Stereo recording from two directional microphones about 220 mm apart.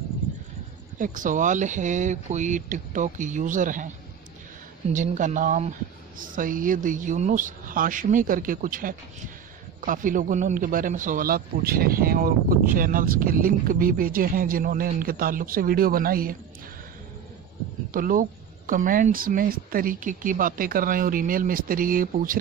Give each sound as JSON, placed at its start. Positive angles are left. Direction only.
{"t": 0.9, "sound": "a man's voice", "side_deg": -35}
{"t": 4.9, "sound": "a man's voice", "side_deg": -35}
{"t": 17.9, "sound": "a man's voice", "side_deg": -40}